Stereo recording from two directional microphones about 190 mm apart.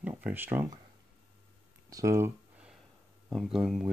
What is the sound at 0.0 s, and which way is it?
Speech, 10° right (ahead or behind).